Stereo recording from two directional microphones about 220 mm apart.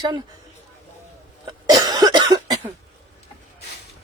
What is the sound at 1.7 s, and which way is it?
Cough, 15° right (ahead or behind).